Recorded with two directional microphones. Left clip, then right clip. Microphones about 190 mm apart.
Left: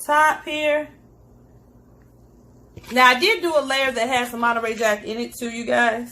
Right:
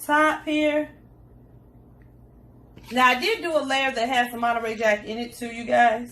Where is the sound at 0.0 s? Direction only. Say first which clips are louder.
Left 3 dB; 45° left (ahead or behind).